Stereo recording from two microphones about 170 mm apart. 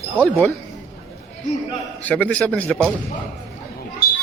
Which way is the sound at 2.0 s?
10° left (ahead or behind).